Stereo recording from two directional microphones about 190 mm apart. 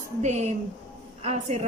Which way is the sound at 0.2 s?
35° right (ahead or behind).